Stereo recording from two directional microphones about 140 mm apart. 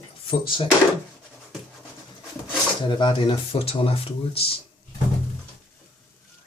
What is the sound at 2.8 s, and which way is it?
Speech, 35° left (ahead or behind).